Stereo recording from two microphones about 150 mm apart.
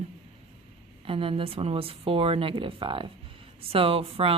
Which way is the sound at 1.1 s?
35° right (ahead or behind).